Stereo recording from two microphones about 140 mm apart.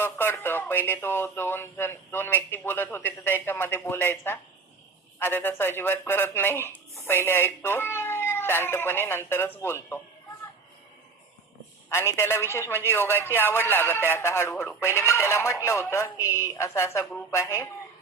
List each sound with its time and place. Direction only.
0.0 s speech: 15° left (ahead or behind)
11.9 s speech: 20° left (ahead or behind)